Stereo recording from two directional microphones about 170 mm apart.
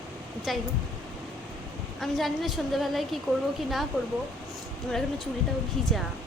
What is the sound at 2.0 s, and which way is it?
A woman's voice, centre (ahead or behind).